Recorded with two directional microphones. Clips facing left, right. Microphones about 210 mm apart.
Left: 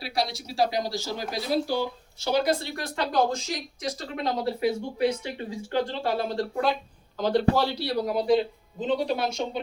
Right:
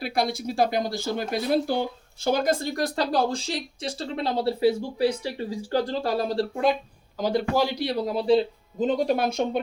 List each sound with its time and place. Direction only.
0.0 s speech: 55° right (ahead or behind); by 6.4 s 35° right (ahead or behind)
7.2 s speech: 10° right (ahead or behind); by 8.4 s 30° right (ahead or behind)
8.8 s speech: 45° right (ahead or behind)